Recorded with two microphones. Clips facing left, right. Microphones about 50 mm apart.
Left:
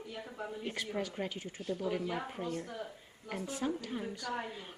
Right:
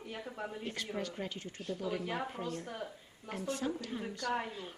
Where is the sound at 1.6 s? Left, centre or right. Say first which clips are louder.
Left 2 dB; left.